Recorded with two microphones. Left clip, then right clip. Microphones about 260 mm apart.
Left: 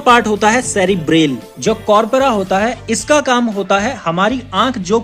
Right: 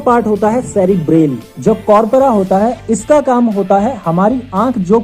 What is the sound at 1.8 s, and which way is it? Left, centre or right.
Speech, left.